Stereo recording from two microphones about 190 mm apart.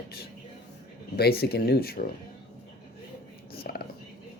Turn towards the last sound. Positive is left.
turn(degrees=55)  # may be behind; listen again after turning